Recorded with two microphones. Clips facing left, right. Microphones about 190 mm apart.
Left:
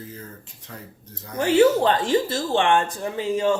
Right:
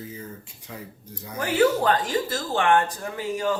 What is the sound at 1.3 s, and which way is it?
Speech, 25° left (ahead or behind).